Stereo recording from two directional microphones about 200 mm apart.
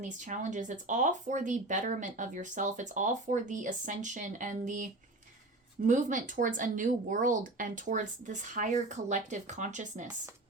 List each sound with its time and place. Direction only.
0.0 s speech: 40° right (ahead or behind)